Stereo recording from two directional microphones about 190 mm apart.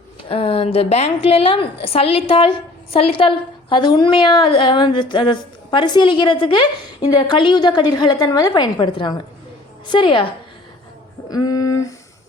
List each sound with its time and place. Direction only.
0.3 s a woman's voice: 30° left (ahead or behind)
11.3 s a woman's voice: 20° left (ahead or behind)